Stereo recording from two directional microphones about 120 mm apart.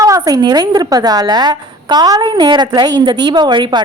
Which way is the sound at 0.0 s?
30° right (ahead or behind).